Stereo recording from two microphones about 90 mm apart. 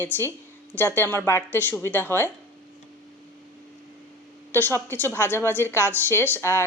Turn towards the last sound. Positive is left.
turn(degrees=25)  # may be behind; listen again after turning